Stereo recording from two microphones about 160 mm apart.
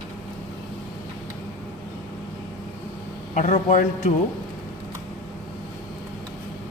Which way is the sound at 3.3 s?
50° left (ahead or behind).